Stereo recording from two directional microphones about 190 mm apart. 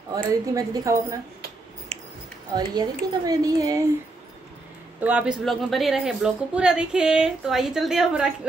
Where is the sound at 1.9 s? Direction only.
30° right (ahead or behind).